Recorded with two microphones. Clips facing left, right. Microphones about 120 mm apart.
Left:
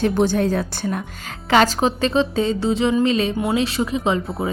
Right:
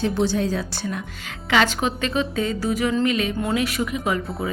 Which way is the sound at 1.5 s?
40° left (ahead or behind).